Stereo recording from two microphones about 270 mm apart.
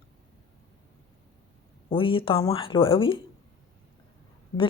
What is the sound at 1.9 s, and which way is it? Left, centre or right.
Speech, centre.